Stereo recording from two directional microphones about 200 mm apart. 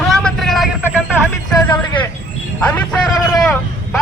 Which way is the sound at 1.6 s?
15° left (ahead or behind).